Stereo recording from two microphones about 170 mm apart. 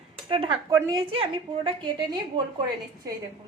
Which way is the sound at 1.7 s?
25° right (ahead or behind).